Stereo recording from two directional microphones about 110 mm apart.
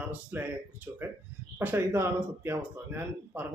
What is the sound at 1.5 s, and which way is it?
A man's voice, 20° right (ahead or behind).